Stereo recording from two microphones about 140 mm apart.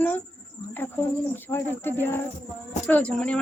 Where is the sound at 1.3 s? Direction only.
15° left (ahead or behind).